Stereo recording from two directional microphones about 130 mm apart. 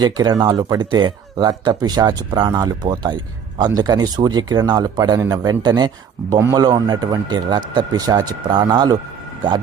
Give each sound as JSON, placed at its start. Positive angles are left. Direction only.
{"t": 0.0, "sound": "a man's voice", "side_deg": -30}